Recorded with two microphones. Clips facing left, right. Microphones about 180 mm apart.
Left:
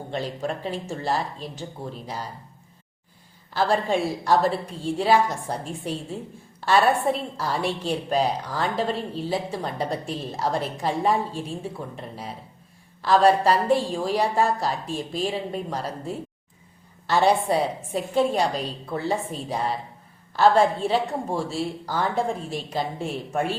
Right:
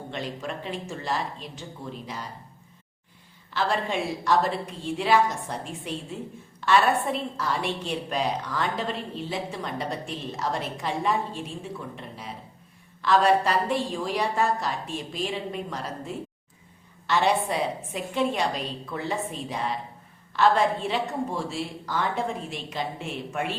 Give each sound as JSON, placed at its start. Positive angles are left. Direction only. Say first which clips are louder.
{"t": 0.1, "sound": "a woman's voice", "louder": "left 5 dB", "side_deg": 35}
{"t": 3.5, "sound": "a woman's voice", "louder": "left 4 dB", "side_deg": 35}
{"t": 13.0, "sound": "a woman's voice", "louder": "left 3 dB", "side_deg": 35}